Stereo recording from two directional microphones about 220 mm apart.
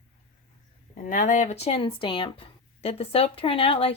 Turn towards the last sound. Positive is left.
turn(degrees=25)  # may be behind; listen again after turning